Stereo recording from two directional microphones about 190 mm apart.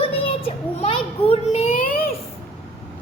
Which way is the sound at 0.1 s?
30° left (ahead or behind).